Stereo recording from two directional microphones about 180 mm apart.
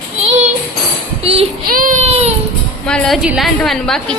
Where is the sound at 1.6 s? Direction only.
55° right (ahead or behind).